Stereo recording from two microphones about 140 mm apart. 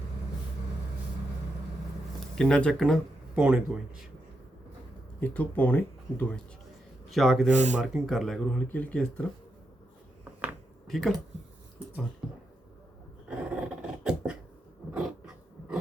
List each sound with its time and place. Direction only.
2.4 s speech: 5° left (ahead or behind)
3.3 s speech: 5° right (ahead or behind)
5.2 s speech: 10° left (ahead or behind)
7.1 s speech: centre (ahead or behind)
7.5 s speech: 55° right (ahead or behind)
8.0 s speech: centre (ahead or behind)
10.8 s speech: centre (ahead or behind)
13.3 s dog: 10° right (ahead or behind)